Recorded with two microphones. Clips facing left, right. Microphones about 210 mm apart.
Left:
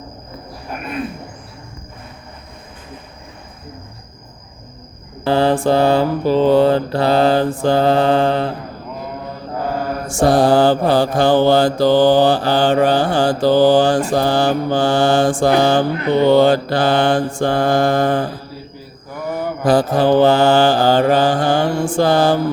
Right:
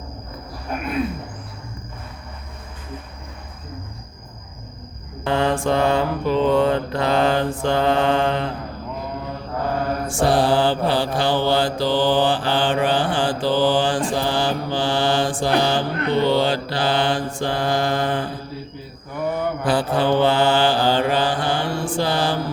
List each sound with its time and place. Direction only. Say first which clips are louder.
5.2 s mantra: left 5 dB; 35° left (ahead or behind)
10.1 s mantra: left 6 dB; 45° left (ahead or behind)
19.6 s mantra: left 7 dB; 40° left (ahead or behind)